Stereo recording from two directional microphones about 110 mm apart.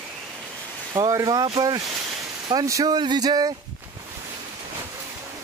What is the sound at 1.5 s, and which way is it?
Speech, 35° right (ahead or behind).